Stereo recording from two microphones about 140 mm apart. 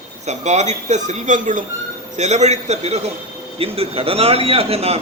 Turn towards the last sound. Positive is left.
turn(degrees=-45)  # may be behind; listen again after turning